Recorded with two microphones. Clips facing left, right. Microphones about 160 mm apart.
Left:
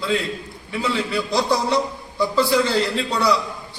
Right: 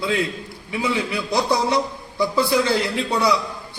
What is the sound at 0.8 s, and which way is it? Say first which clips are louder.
A man's voice: left 1 dB; 15° right (ahead or behind).